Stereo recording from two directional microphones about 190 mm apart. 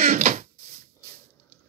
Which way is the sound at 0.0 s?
40° right (ahead or behind).